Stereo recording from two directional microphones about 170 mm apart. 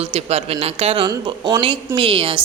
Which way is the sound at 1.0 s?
25° right (ahead or behind).